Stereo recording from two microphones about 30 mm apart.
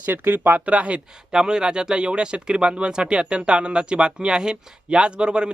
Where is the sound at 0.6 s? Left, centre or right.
Right.